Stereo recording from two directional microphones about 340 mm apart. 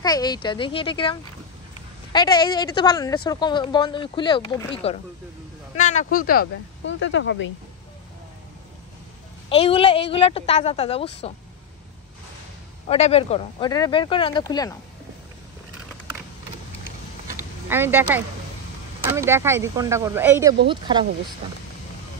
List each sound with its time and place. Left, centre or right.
0.0 s speech: centre
2.1 s speech: centre
5.8 s speech: left
9.5 s speech: centre
12.8 s speech: centre
17.6 s speech: centre